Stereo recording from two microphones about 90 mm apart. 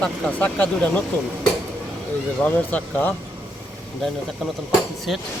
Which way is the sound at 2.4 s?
15° left (ahead or behind).